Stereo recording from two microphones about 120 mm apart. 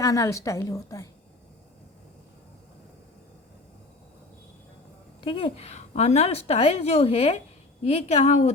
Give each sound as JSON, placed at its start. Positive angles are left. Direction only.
{"t": 0.0, "sound": "a woman's voice", "side_deg": 30}
{"t": 5.2, "sound": "a woman's voice", "side_deg": 50}